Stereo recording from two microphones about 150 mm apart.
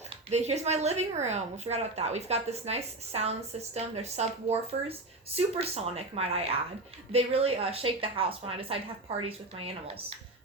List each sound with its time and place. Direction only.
0.3 s a woman's voice: 45° right (ahead or behind)